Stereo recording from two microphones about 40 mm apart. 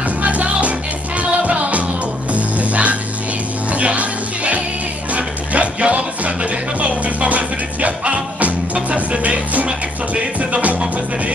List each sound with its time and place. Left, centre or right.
0.2 s music: right